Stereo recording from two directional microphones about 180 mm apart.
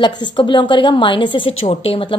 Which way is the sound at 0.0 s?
25° left (ahead or behind).